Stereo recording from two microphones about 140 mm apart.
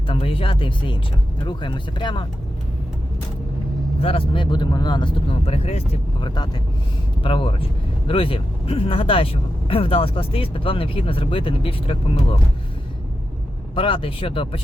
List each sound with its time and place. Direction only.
0.1 s speech: 40° left (ahead or behind)
4.0 s speech: 35° left (ahead or behind)
13.7 s speech: 40° left (ahead or behind)